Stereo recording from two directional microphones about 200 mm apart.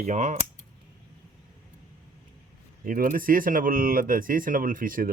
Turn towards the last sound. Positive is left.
turn(degrees=-45)  # may be behind; listen again after turning